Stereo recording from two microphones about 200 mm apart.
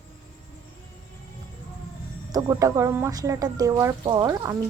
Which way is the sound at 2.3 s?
15° right (ahead or behind).